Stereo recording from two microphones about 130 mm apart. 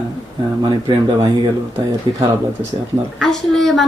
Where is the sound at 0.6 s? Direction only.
35° right (ahead or behind).